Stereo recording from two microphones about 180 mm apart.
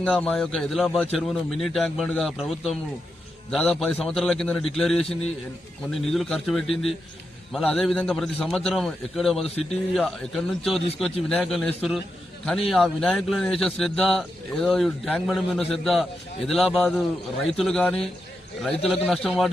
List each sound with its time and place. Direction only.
0.0 s a man's voice: 5° left (ahead or behind)
10.8 s a man's voice: 30° left (ahead or behind)
11.3 s a man's voice: centre (ahead or behind)